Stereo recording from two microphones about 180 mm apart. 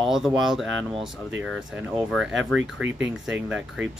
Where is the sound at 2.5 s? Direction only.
90° right.